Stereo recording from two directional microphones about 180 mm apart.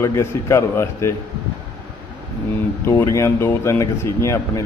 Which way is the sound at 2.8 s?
15° left (ahead or behind).